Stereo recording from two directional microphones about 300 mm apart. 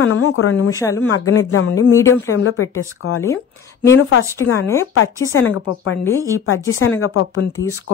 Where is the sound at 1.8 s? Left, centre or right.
Centre.